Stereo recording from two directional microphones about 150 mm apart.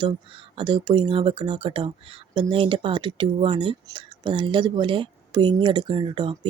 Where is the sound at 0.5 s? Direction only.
30° right (ahead or behind).